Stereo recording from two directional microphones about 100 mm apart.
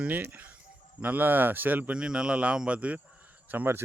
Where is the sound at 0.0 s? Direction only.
20° right (ahead or behind).